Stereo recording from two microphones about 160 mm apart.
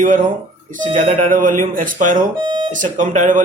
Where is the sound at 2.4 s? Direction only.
30° right (ahead or behind).